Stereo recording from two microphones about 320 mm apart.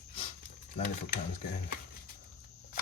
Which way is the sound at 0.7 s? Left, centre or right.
Left.